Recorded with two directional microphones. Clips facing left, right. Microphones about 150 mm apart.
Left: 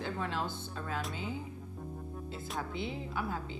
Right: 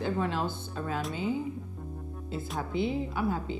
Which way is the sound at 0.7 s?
20° right (ahead or behind).